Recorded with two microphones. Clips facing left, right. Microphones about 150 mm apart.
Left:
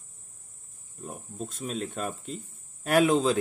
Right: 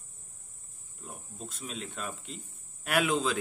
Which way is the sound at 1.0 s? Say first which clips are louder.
Left 7 dB; 50° left (ahead or behind).